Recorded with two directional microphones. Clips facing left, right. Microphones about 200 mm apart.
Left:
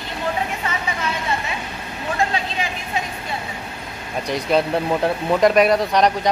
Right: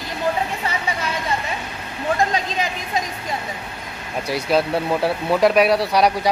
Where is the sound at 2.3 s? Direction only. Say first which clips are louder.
Right 2 dB; 40° right (ahead or behind).